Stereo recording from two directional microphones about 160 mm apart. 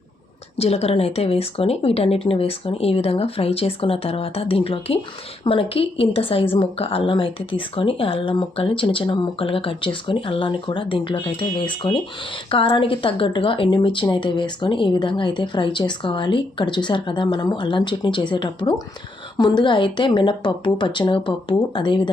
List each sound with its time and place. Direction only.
0.5 s a woman's voice: 40° left (ahead or behind)